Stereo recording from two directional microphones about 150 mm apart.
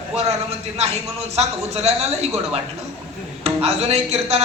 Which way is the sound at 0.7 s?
45° right (ahead or behind).